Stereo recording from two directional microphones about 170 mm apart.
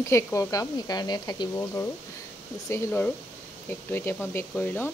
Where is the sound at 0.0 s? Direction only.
15° left (ahead or behind).